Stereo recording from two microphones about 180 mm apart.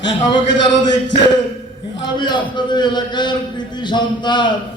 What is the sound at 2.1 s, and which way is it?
Speech, 25° left (ahead or behind).